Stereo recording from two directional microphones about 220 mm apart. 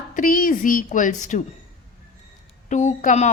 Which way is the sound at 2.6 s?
35° left (ahead or behind).